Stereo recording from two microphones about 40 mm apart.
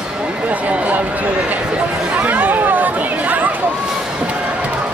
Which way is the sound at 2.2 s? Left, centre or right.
Right.